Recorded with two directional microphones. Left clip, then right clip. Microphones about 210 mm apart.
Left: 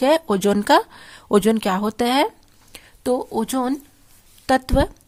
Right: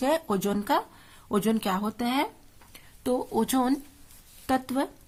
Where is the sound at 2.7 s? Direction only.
35° left (ahead or behind).